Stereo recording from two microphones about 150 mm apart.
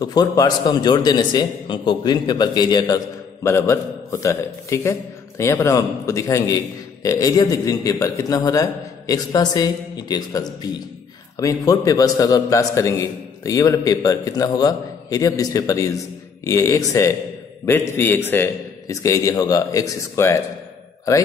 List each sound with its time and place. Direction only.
0.0 s a man's voice: 25° left (ahead or behind)